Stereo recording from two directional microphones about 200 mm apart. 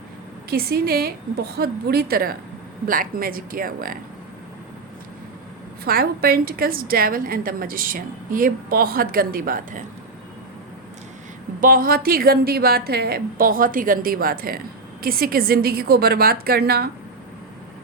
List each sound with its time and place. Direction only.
0.5 s a woman's voice: 50° right (ahead or behind)
5.8 s a woman's voice: 50° right (ahead or behind)
11.6 s a woman's voice: 45° right (ahead or behind)